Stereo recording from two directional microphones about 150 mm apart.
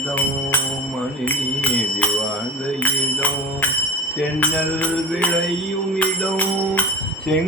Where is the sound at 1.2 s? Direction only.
10° left (ahead or behind).